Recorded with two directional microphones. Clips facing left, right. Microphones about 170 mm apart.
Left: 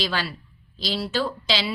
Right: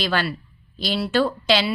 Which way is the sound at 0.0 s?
60° right (ahead or behind).